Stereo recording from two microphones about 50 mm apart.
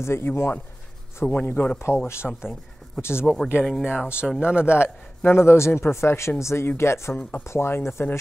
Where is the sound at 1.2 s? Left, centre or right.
Centre.